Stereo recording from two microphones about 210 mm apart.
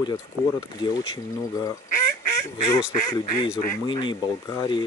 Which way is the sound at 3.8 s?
20° left (ahead or behind).